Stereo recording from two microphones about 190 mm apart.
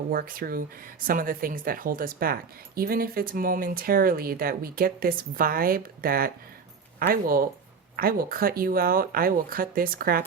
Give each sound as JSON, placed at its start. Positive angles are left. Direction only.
{"t": 0.1, "sound": "speech", "side_deg": -50}